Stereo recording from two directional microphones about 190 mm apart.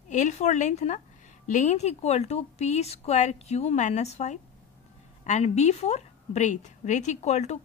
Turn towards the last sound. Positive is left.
turn(degrees=35)  # may be behind; listen again after turning